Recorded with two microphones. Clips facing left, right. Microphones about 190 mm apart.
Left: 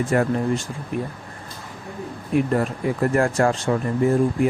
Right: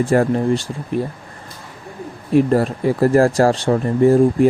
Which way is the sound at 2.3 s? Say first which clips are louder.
Right 6 dB; 35° right (ahead or behind).